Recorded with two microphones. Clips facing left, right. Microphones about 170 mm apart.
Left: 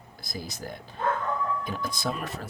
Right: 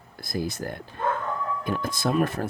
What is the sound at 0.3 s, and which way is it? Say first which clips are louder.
Speech: right 7 dB; 55° right (ahead or behind).